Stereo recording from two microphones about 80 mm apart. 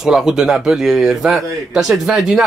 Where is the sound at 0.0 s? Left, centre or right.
Centre.